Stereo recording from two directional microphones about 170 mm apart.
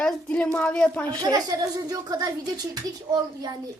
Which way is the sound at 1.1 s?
20° right (ahead or behind).